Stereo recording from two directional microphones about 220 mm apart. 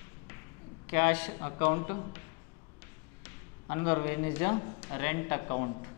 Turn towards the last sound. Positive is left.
turn(degrees=15)  # may be behind; listen again after turning